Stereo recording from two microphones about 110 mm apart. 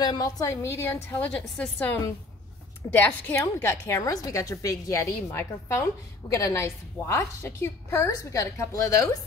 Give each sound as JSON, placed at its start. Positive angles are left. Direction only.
{"t": 0.0, "sound": "a woman's voice", "side_deg": 40}